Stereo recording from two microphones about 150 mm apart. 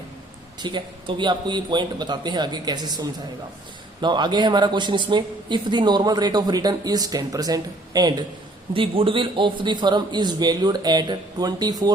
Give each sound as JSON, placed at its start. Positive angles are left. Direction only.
{"t": 0.6, "sound": "speech", "side_deg": -30}
{"t": 8.7, "sound": "speech", "side_deg": -35}